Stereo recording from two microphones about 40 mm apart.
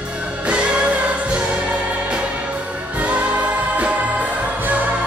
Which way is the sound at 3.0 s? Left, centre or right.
Right.